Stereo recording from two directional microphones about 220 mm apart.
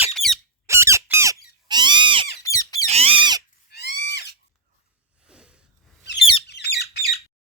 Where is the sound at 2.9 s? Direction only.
25° right (ahead or behind).